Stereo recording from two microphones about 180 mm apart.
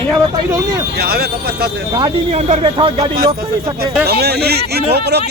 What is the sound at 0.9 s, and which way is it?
Speech, 60° right (ahead or behind).